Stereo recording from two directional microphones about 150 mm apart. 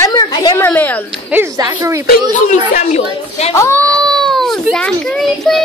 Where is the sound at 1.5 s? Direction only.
20° right (ahead or behind).